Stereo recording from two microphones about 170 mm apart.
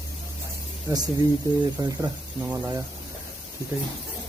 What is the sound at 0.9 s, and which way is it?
Speech, 15° right (ahead or behind).